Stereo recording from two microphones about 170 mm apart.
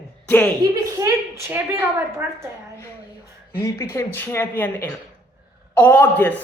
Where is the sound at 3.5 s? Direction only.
15° left (ahead or behind).